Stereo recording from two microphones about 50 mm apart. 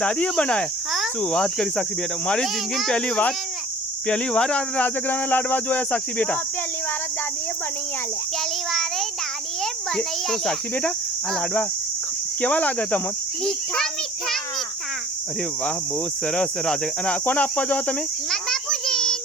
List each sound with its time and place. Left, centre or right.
0.0 s speech: left; by 2.9 s centre
2.9 s speech: left
4.8 s speech: left
8.7 s speech: centre
12.4 s speech: left
16.2 s speech: centre
18.3 s a sound: centre